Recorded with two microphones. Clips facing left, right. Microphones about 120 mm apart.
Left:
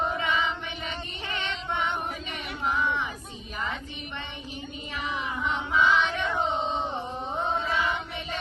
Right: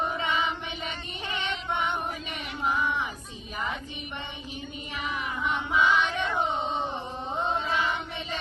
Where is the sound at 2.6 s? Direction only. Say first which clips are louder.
Even; 5° right (ahead or behind).